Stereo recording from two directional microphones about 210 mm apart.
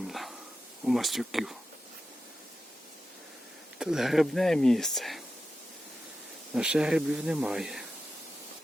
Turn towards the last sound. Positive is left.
turn(degrees=0)  # may be behind; listen again after turning